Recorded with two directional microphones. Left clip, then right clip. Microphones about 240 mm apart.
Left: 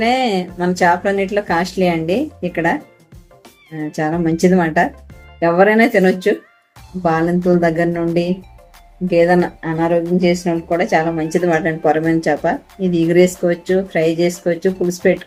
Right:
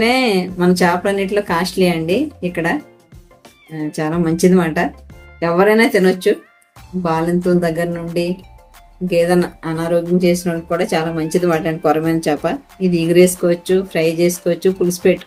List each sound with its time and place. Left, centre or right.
0.0 s speech: centre
3.8 s speech: centre